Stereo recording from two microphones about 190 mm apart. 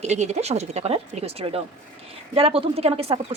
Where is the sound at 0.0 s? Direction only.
35° right (ahead or behind).